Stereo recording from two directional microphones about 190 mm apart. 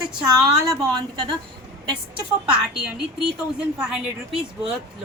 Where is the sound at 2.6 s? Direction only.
5° right (ahead or behind).